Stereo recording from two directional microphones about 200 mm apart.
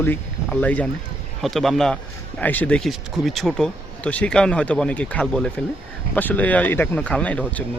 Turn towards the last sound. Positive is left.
turn(degrees=5)  # may be behind; listen again after turning